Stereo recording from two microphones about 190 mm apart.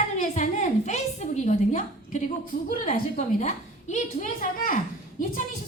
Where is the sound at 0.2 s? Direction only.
40° left (ahead or behind).